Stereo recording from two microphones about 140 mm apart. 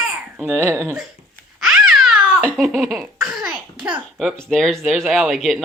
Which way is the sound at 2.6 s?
Centre (ahead or behind).